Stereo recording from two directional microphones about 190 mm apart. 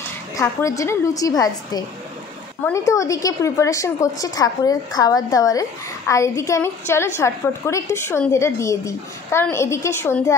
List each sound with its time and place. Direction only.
0.4 s a woman's voice: 15° left (ahead or behind)